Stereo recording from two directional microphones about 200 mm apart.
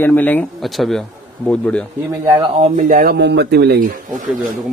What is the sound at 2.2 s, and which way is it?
Speech, 25° right (ahead or behind).